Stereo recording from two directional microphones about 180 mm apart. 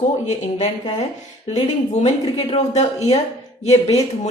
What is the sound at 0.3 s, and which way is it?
A woman's voice, 40° left (ahead or behind).